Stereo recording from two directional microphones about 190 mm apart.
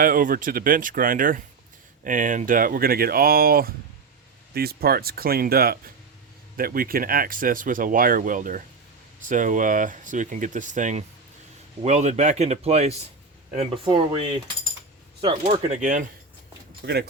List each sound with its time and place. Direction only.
0.0 s speech: 50° right (ahead or behind)
16.8 s speech: 55° right (ahead or behind)